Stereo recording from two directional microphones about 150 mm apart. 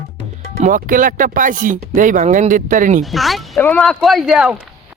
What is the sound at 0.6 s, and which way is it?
Speech, 65° right (ahead or behind).